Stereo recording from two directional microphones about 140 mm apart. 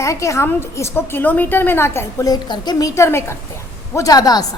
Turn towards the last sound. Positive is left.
turn(degrees=25)  # may be behind; listen again after turning